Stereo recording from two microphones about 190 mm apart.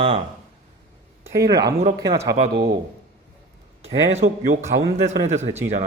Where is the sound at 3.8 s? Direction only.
35° right (ahead or behind).